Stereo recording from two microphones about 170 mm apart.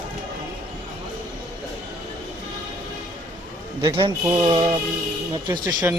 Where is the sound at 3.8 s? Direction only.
25° right (ahead or behind).